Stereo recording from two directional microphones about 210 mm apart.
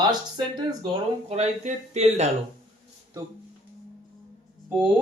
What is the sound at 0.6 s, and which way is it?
Speech, 25° right (ahead or behind).